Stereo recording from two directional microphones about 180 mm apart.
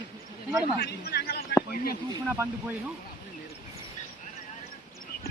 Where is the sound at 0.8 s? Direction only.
60° left (ahead or behind).